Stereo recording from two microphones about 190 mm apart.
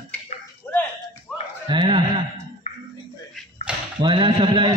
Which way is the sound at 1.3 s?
5° left (ahead or behind).